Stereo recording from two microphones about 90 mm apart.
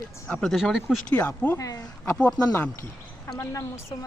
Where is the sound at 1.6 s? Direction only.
40° left (ahead or behind).